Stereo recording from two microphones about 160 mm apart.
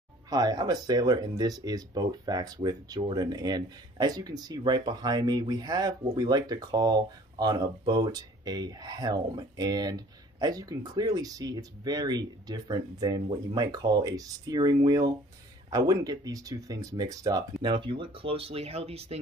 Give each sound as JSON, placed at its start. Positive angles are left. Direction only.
{"t": 0.3, "sound": "speech", "side_deg": -25}